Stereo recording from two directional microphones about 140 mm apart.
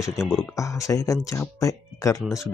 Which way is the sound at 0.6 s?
20° left (ahead or behind).